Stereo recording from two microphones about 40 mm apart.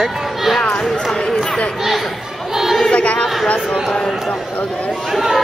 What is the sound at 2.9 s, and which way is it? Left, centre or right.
Chatter, left.